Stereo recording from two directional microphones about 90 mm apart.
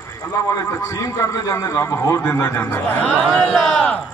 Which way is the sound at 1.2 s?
35° left (ahead or behind).